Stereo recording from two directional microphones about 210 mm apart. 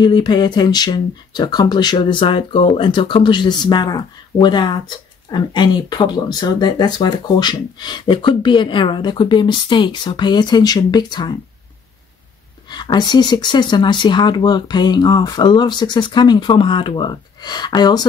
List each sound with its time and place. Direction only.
0.0 s speech: 20° left (ahead or behind)
12.6 s speech: 20° left (ahead or behind)